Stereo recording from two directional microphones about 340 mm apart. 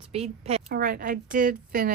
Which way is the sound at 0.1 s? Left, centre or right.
Centre.